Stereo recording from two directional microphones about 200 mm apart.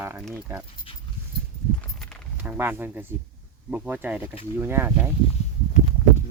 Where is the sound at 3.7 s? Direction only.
5° right (ahead or behind).